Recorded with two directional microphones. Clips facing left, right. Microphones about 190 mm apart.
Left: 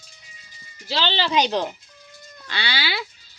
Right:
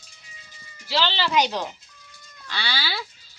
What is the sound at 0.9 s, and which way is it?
Speech, 20° left (ahead or behind).